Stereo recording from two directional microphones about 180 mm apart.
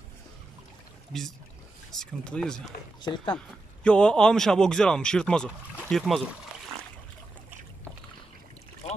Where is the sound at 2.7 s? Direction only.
25° left (ahead or behind).